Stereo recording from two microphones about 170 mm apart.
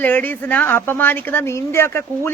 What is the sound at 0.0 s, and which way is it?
Speech, 10° left (ahead or behind).